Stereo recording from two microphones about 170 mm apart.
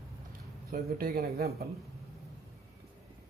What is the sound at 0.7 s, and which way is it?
Speech, 60° right (ahead or behind).